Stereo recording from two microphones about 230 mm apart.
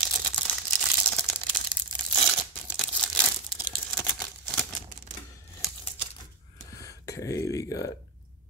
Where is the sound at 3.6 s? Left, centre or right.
Centre.